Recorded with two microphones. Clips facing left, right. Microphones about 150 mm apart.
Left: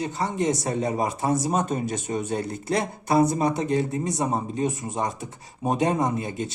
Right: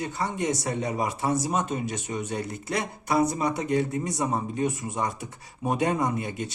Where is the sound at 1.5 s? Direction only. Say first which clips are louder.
Left 3 dB; 40° left (ahead or behind).